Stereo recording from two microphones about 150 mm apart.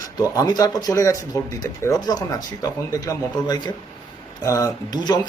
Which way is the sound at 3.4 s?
30° left (ahead or behind).